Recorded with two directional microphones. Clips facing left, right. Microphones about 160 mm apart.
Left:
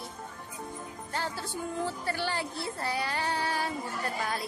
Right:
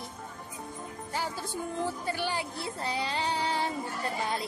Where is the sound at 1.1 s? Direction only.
10° right (ahead or behind).